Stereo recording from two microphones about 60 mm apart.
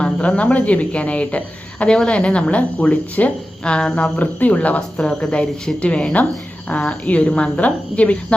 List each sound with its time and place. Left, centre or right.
0.0 s a woman's voice: left
3.6 s a woman's voice: centre